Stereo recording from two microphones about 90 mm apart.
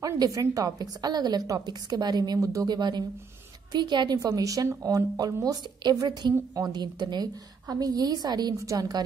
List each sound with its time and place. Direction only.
0.0 s a woman's voice: 40° right (ahead or behind)